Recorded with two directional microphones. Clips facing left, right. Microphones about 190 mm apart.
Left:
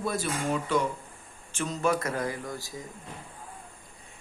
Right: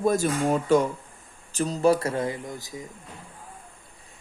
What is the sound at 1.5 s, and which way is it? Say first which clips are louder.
Speech: right 6 dB; 35° right (ahead or behind).